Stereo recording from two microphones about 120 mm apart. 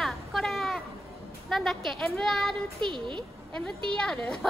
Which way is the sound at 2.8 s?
45° right (ahead or behind).